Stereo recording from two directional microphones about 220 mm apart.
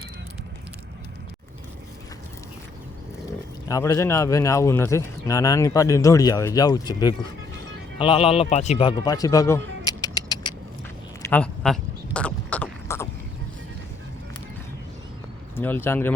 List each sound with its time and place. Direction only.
3.7 s speech: 15° left (ahead or behind)
11.3 s a sound: 5° left (ahead or behind)
15.5 s speech: 10° left (ahead or behind)